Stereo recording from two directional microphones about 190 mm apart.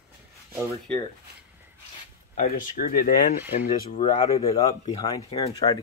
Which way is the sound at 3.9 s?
40° left (ahead or behind).